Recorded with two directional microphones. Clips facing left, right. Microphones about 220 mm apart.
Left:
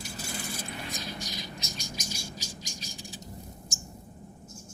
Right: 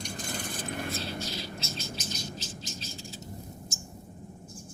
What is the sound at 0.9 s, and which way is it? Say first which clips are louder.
Bird: right 4 dB; 15° left (ahead or behind).